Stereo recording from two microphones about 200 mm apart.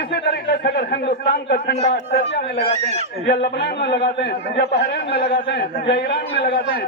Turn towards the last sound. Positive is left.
turn(degrees=55)  # may be behind; listen again after turning